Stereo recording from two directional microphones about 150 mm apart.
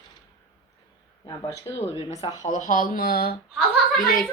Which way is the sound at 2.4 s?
60° left (ahead or behind).